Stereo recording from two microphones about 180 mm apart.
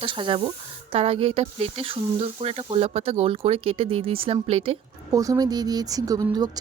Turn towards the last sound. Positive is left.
turn(degrees=-20)  # may be behind; listen again after turning